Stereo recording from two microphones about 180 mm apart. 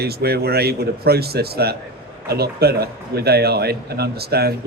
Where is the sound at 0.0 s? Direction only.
60° right (ahead or behind).